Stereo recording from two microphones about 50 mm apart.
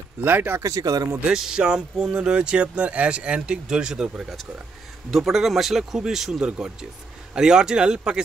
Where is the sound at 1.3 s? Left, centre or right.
Centre.